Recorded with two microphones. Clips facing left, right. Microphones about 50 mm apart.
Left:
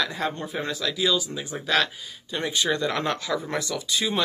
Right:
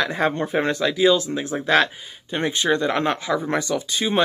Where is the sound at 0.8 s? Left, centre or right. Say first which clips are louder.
Right 6 dB; right.